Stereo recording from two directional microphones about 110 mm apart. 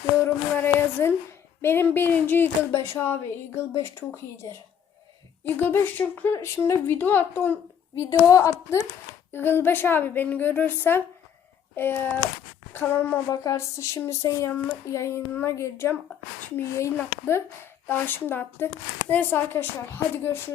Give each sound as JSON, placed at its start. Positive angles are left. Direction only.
{"t": 0.5, "sound": "speech", "side_deg": 20}
{"t": 5.5, "sound": "speech", "side_deg": 20}
{"t": 12.7, "sound": "a sound", "side_deg": 15}
{"t": 13.3, "sound": "speech", "side_deg": 30}